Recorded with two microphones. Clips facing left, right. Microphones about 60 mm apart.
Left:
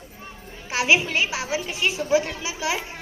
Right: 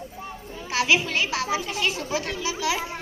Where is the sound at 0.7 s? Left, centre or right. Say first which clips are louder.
Left 2 dB; left.